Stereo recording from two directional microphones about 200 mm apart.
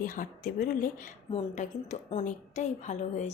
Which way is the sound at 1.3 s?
30° left (ahead or behind).